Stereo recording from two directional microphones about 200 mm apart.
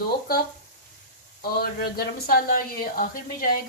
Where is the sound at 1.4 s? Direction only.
50° left (ahead or behind).